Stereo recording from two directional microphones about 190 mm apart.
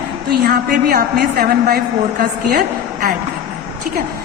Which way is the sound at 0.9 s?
50° right (ahead or behind).